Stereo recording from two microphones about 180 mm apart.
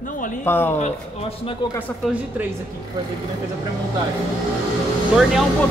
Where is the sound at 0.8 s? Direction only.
35° left (ahead or behind).